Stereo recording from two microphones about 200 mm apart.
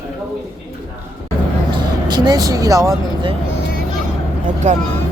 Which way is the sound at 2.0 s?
20° right (ahead or behind).